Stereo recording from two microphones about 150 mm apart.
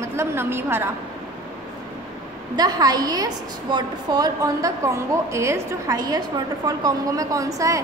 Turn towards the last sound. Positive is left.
turn(degrees=-20)  # may be behind; listen again after turning